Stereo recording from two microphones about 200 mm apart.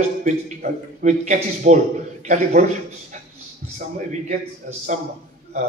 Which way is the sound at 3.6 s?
35° right (ahead or behind).